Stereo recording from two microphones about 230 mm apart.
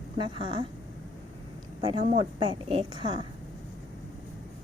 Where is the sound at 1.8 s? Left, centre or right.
Right.